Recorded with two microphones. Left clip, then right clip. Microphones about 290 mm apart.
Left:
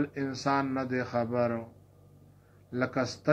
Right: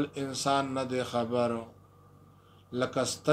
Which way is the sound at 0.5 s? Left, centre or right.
Right.